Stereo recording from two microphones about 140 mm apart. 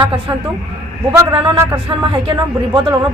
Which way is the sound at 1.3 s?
30° right (ahead or behind).